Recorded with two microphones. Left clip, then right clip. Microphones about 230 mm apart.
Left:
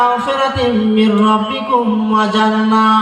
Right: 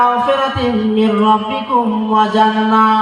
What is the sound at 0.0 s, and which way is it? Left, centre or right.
Music, left.